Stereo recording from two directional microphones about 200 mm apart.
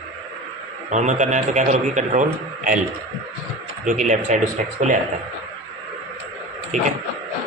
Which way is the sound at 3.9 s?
40° right (ahead or behind).